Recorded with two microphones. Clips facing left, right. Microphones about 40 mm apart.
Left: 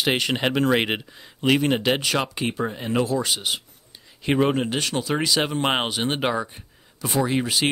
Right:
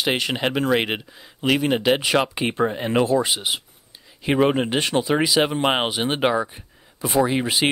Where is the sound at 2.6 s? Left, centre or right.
Right.